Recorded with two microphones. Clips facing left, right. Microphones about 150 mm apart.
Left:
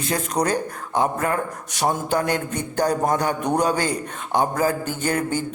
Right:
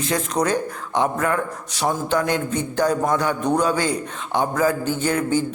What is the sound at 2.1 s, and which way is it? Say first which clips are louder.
A man's voice: right 1 dB; 45° left (ahead or behind).